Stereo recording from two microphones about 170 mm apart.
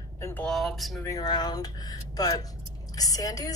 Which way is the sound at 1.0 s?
20° left (ahead or behind).